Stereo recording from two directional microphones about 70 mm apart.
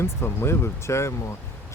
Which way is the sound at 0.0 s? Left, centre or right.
Left.